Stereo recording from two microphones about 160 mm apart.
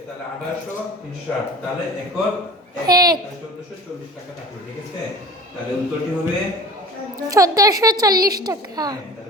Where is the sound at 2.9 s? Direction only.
25° right (ahead or behind).